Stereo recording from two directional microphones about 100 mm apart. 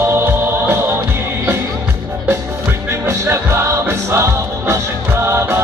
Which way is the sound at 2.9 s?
25° right (ahead or behind).